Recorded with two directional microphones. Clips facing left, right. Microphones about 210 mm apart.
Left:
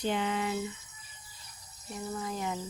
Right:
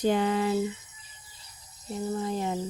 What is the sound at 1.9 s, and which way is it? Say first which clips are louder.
Speech: right 6 dB; 30° right (ahead or behind).